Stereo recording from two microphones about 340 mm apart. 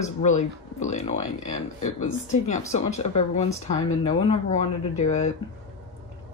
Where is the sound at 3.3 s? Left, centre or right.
Centre.